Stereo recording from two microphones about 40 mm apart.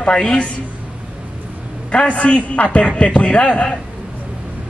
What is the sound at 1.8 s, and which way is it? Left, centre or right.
A man's voice, left.